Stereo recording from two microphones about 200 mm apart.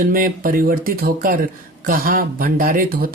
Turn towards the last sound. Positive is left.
turn(degrees=-45)  # may be behind; listen again after turning